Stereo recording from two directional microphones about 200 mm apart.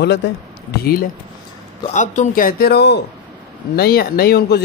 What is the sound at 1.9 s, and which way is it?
A man's voice, 40° left (ahead or behind).